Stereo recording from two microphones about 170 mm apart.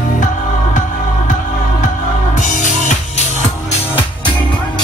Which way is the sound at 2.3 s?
50° left (ahead or behind).